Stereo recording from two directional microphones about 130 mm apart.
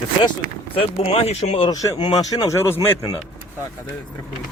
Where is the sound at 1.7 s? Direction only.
30° left (ahead or behind).